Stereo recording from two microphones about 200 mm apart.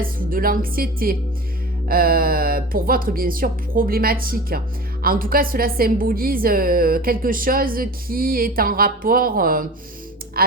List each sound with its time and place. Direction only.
0.0 s a woman's voice: 45° right (ahead or behind)